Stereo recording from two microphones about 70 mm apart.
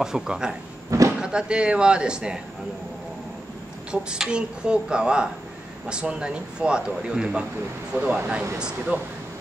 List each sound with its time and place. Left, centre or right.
0.0 s a man's voice: centre
0.8 s a sound: right
1.2 s a man's voice: centre
3.9 s a man's voice: centre